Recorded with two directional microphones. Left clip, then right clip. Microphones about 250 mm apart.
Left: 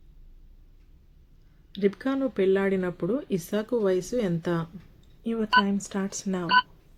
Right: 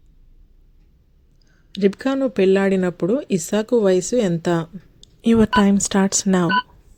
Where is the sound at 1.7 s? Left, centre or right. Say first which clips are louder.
Right 7 dB; right.